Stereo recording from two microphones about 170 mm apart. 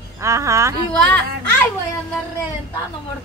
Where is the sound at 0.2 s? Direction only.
15° right (ahead or behind).